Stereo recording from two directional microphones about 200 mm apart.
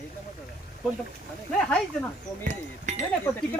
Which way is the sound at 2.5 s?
35° right (ahead or behind).